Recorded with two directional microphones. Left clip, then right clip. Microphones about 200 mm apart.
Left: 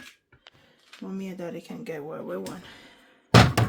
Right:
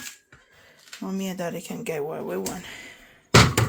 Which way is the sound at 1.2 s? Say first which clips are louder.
Right 5 dB; 15° right (ahead or behind).